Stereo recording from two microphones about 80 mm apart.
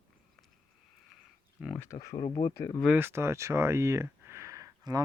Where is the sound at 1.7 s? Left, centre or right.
Left.